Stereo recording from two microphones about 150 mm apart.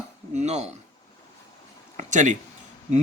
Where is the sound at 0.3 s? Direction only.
50° right (ahead or behind).